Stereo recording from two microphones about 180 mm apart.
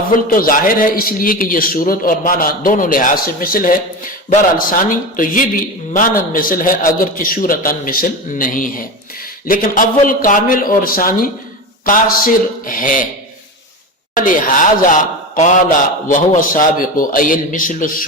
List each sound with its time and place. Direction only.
0.1 s a man's voice: 50° left (ahead or behind)
14.2 s a man's voice: 50° left (ahead or behind)